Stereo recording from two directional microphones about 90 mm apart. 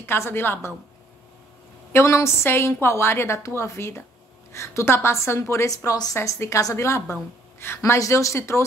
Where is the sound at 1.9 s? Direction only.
30° left (ahead or behind).